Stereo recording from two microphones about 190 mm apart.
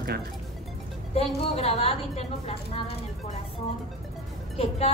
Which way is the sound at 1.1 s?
30° left (ahead or behind).